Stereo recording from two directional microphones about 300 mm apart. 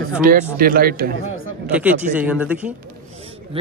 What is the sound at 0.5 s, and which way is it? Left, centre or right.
Speech, right.